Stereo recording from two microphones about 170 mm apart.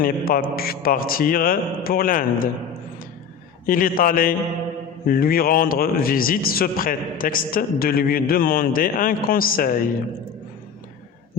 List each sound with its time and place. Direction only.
0.0 s a man's voice: 60° left (ahead or behind)
3.7 s a man's voice: 55° left (ahead or behind)